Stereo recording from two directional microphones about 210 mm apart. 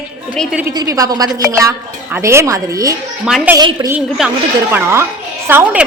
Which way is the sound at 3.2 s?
Centre (ahead or behind).